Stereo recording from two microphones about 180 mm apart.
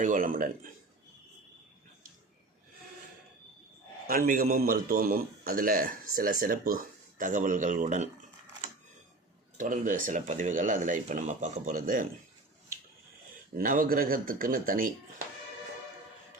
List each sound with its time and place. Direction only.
0.0 s a man's voice: 45° right (ahead or behind)
4.0 s a man's voice: 50° right (ahead or behind)
9.6 s a man's voice: 45° right (ahead or behind)
13.3 s a man's voice: 50° right (ahead or behind)